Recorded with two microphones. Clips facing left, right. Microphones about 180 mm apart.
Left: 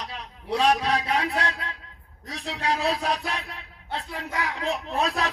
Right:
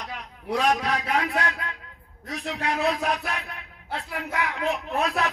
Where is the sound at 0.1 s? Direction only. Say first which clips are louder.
Right 2 dB; 30° left (ahead or behind).